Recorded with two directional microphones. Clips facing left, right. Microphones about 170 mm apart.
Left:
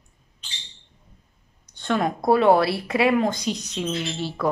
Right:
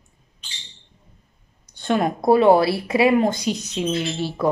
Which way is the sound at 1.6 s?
5° right (ahead or behind).